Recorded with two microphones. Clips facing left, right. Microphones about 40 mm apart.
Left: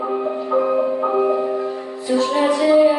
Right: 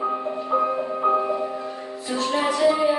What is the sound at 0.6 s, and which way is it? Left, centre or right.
Music, centre.